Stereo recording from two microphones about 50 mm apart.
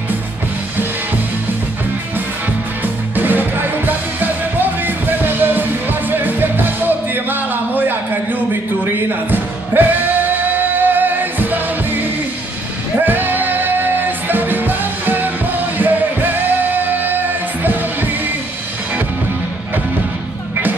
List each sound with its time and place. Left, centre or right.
2.8 s music: right